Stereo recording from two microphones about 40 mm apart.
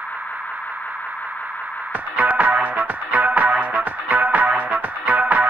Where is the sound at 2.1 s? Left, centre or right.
Right.